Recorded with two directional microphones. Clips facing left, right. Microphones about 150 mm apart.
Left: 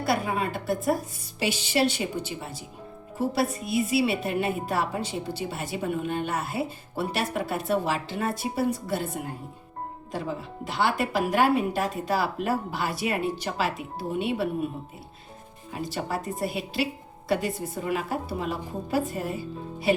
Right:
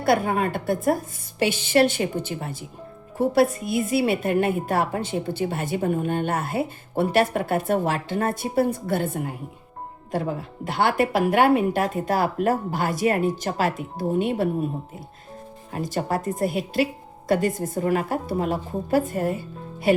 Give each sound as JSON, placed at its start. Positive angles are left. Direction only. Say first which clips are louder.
{"t": 0.0, "sound": "a woman's voice", "louder": "right 5 dB", "side_deg": -55}
{"t": 15.7, "sound": "speech", "louder": "right 5 dB", "side_deg": -45}